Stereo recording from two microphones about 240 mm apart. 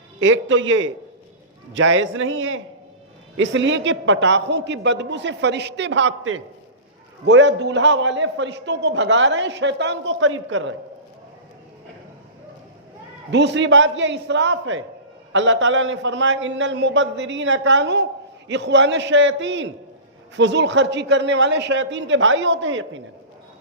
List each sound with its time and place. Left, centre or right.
0.2 s a man's voice: right
13.3 s a man's voice: right